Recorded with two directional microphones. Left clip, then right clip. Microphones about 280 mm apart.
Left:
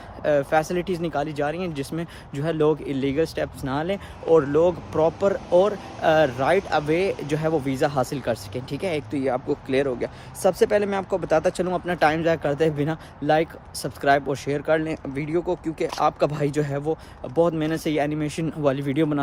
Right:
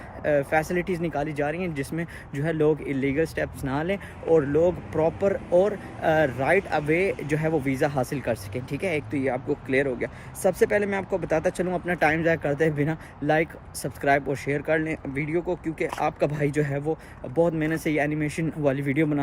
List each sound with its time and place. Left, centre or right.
0.3 s speech: centre